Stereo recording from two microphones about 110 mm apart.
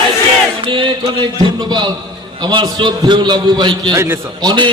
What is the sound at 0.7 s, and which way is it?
A man's voice, 45° right (ahead or behind).